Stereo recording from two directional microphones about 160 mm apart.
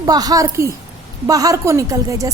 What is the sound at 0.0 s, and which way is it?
A woman's voice, 25° right (ahead or behind).